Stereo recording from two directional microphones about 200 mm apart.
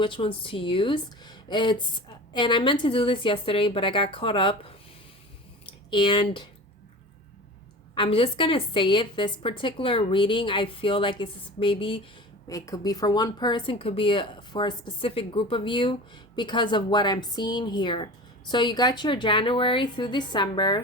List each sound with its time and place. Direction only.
0.0 s speech: 25° left (ahead or behind)
7.9 s speech: 25° left (ahead or behind)
12.5 s speech: 15° left (ahead or behind)